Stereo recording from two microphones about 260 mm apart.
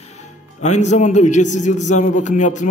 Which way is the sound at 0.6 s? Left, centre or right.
Left.